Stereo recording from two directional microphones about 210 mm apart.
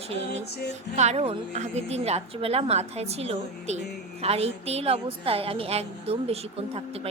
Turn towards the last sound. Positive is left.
turn(degrees=-30)  # may be behind; listen again after turning